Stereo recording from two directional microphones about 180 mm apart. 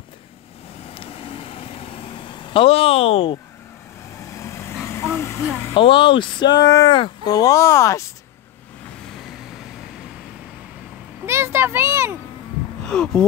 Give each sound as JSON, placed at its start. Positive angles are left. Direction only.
{"t": 0.9, "sound": "vehicle", "side_deg": 30}
{"t": 4.4, "sound": "vehicle", "side_deg": 15}
{"t": 5.8, "sound": "speech", "side_deg": 25}
{"t": 11.2, "sound": "a child's voice", "side_deg": -15}
{"t": 12.8, "sound": "speech", "side_deg": 5}